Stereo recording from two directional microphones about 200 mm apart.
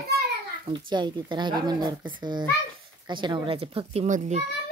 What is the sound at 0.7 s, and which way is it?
Speech, 25° right (ahead or behind).